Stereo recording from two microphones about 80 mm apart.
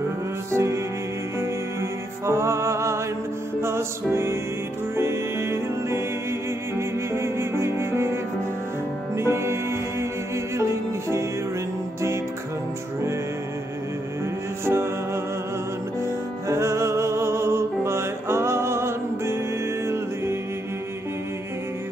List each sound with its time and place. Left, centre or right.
0.5 s music: right
7.1 s music: right
14.6 s music: right
16.4 s music: right